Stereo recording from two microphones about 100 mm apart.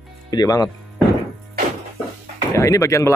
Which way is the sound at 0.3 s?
40° left (ahead or behind).